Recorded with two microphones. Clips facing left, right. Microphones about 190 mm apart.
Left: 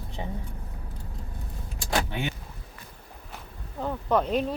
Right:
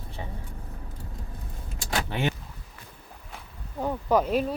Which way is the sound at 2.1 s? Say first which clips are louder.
Right 4 dB; 70° right (ahead or behind).